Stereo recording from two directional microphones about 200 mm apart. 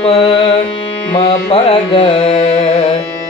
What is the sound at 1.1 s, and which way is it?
Music, 25° left (ahead or behind).